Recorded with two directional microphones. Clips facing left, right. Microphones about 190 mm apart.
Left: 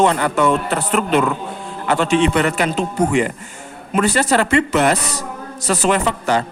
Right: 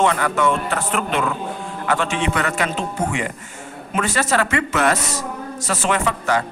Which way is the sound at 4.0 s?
35° left (ahead or behind).